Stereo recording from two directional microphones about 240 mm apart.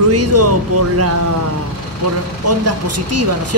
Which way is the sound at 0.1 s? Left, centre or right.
Right.